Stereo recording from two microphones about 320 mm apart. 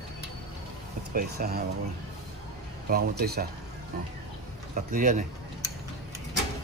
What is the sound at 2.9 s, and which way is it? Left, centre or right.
Speech, right.